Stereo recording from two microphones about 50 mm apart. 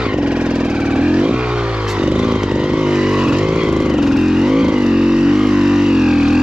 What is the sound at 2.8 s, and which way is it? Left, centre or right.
Vehicle, centre.